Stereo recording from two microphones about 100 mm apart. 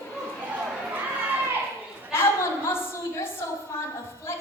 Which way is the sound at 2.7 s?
25° left (ahead or behind).